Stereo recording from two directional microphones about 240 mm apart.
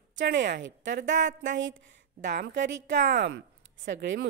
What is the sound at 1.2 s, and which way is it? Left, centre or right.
Speech, right.